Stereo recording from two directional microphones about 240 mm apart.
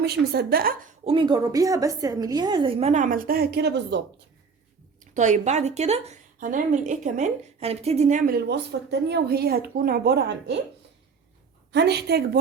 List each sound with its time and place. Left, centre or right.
0.0 s a woman's voice: right
1.0 s a woman's voice: right
5.1 s a woman's voice: right
11.7 s a woman's voice: right